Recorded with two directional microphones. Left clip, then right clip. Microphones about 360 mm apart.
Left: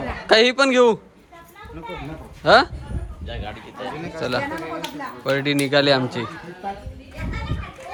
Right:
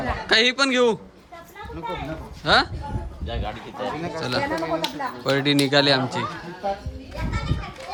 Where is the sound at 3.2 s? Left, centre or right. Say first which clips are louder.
Right 2 dB; right.